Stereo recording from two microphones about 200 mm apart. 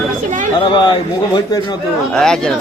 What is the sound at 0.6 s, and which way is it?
A man's voice, 25° left (ahead or behind).